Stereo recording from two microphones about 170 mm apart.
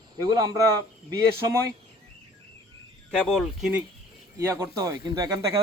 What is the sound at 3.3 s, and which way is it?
Speech, centre (ahead or behind).